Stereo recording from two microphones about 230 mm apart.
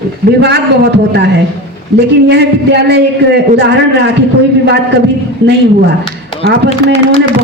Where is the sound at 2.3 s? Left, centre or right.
Right.